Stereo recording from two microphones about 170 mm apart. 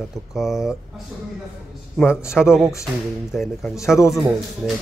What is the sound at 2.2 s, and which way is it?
Speech, 5° right (ahead or behind).